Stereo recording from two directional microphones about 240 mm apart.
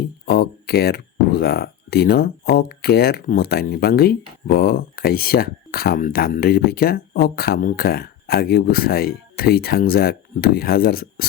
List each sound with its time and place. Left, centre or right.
0.3 s speech: left